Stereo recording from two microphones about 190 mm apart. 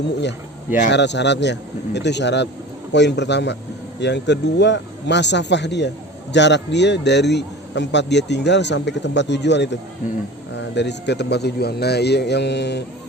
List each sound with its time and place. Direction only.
0.9 s a man's voice: 65° left (ahead or behind)